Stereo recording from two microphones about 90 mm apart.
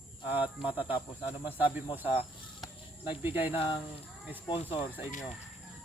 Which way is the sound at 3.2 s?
20° right (ahead or behind).